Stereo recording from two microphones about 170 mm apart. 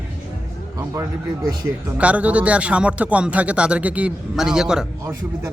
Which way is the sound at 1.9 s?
10° right (ahead or behind).